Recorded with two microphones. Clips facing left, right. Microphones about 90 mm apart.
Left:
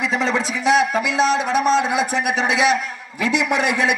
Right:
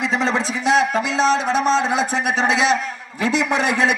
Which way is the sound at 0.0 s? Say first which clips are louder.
Even; 35° right (ahead or behind).